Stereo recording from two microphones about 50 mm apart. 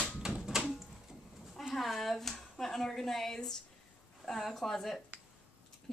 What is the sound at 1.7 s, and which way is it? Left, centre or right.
Speech, centre.